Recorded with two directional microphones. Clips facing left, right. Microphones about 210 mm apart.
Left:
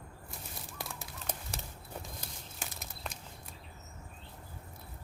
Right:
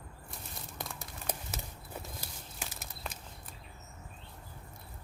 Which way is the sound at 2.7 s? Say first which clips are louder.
Even; centre (ahead or behind).